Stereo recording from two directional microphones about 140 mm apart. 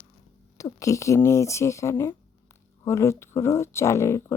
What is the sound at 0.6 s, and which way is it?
Speech, 25° left (ahead or behind).